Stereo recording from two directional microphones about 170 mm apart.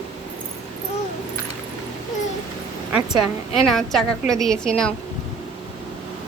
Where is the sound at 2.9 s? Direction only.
5° right (ahead or behind).